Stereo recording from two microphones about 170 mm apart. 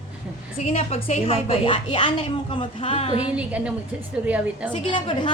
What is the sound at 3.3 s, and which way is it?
Chuckle, 10° right (ahead or behind).